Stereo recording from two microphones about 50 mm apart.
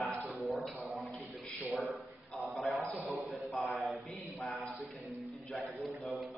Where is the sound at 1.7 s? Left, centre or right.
Centre.